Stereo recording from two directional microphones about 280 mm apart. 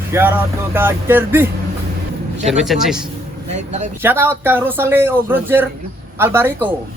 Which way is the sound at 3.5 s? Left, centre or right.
Right.